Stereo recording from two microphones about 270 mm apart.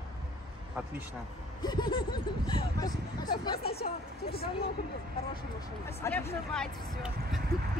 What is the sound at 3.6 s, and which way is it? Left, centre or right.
Speech, left.